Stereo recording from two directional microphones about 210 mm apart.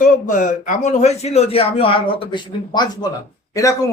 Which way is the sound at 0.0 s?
40° left (ahead or behind).